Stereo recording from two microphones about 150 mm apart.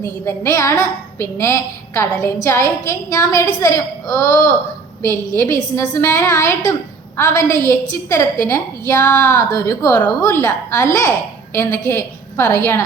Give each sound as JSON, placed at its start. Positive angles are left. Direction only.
{"t": 0.0, "sound": "a woman's voice", "side_deg": 15}